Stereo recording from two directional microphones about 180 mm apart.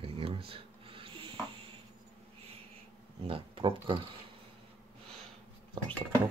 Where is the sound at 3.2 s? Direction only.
30° right (ahead or behind).